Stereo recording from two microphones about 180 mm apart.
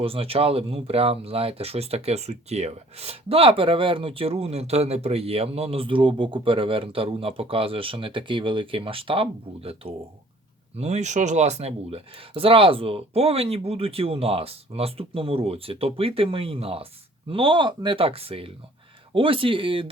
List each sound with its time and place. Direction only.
0.0 s speech: 30° right (ahead or behind)